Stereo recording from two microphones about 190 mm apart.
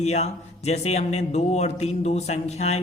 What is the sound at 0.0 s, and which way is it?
Speech, 35° left (ahead or behind).